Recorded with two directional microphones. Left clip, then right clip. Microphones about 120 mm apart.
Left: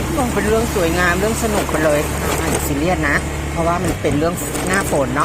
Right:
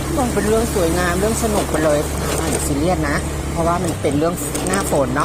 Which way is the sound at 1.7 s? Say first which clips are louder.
Left 2 dB; 10° right (ahead or behind).